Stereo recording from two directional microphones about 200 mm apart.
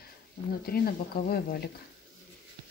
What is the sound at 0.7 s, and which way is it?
Speech, 50° left (ahead or behind).